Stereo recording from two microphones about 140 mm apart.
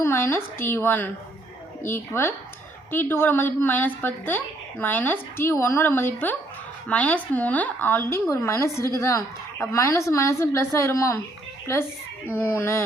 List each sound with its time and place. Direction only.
0.0 s a woman's voice: 15° left (ahead or behind)